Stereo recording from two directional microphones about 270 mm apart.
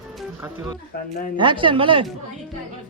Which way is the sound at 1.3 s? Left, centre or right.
Centre.